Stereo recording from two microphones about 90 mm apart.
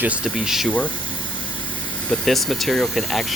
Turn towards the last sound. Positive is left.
turn(degrees=0)  # may be behind; listen again after turning